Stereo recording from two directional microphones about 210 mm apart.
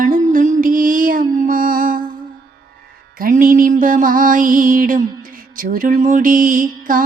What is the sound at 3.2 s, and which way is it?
Music, 40° right (ahead or behind).